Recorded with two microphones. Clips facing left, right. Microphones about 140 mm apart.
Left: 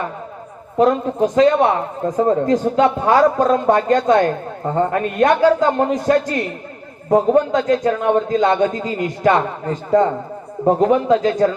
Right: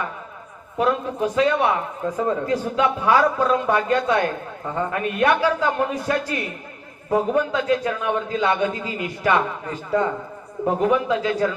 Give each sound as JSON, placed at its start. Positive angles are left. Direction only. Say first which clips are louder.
{"t": 0.8, "sound": "a man's voice", "louder": "left 6 dB", "side_deg": 40}